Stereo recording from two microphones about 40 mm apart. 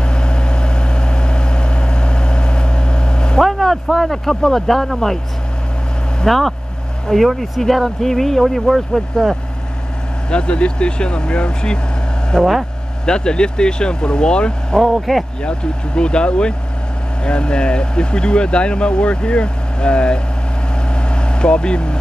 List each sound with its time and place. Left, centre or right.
0.0 s vehicle: left
3.4 s speech: centre
6.2 s speech: centre
10.3 s speech: left
14.8 s speech: centre
15.4 s speech: left
20.9 s vehicle: left